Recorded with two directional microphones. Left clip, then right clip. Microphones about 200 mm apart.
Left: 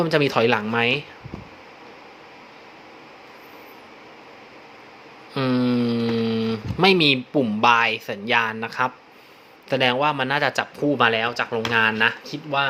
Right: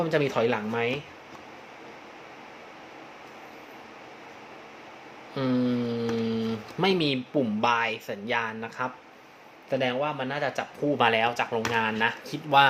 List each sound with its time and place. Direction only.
0.0 s speech: 20° left (ahead or behind)
5.3 s speech: 25° left (ahead or behind)
10.9 s speech: 10° left (ahead or behind)
11.6 s speech: 20° left (ahead or behind)
12.3 s speech: centre (ahead or behind)